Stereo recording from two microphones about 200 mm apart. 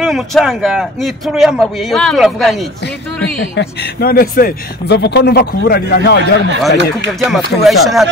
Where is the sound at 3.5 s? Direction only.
55° left (ahead or behind).